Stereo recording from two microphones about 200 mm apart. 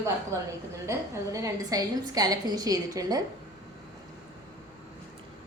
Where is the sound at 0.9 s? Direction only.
15° right (ahead or behind).